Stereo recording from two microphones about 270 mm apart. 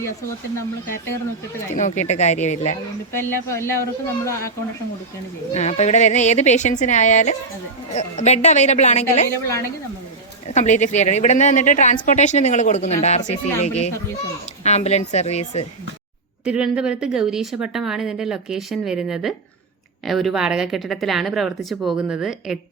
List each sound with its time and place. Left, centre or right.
1.7 s speech: left
3.1 s speech: centre
5.5 s speech: left
10.5 s speech: left
16.5 s speech: centre